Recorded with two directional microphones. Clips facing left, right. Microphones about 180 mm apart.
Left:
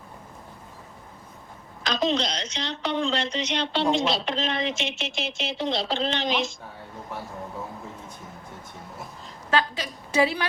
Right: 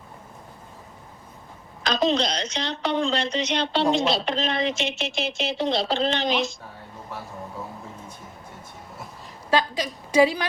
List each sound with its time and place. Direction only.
1.8 s a woman's voice: 35° right (ahead or behind)
9.6 s a woman's voice: 15° right (ahead or behind)